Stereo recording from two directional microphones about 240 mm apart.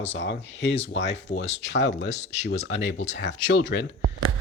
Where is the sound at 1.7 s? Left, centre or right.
Left.